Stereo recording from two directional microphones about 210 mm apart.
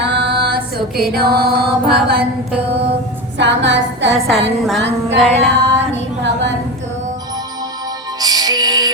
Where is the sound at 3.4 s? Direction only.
60° right (ahead or behind).